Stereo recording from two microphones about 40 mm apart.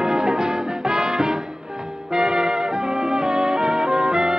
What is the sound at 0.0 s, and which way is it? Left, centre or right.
Music, centre.